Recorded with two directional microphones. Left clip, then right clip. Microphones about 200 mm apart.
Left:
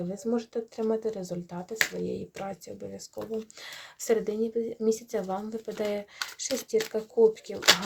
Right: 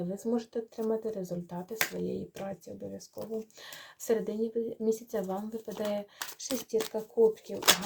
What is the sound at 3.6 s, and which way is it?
Speech, 20° left (ahead or behind).